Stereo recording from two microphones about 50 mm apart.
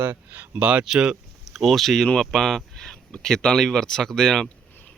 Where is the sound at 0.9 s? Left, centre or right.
Centre.